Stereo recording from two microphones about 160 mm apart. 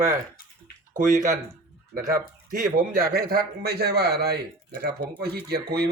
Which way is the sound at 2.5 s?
60° right (ahead or behind).